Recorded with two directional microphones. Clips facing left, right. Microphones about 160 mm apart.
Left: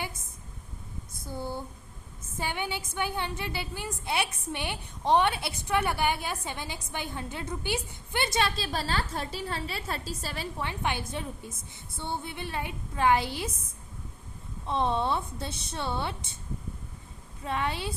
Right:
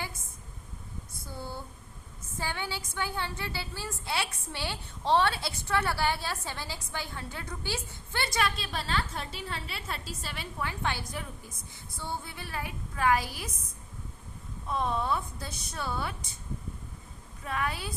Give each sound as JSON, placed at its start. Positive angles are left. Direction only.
{"t": 1.3, "sound": "a sound", "side_deg": 20}
{"t": 2.4, "sound": "a woman's voice", "side_deg": 20}
{"t": 10.6, "sound": "a woman's voice", "side_deg": 20}
{"t": 14.7, "sound": "a woman's voice", "side_deg": 30}
{"t": 17.4, "sound": "a woman's voice", "side_deg": 25}